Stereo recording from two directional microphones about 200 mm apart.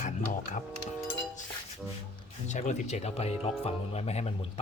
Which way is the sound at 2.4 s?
35° left (ahead or behind).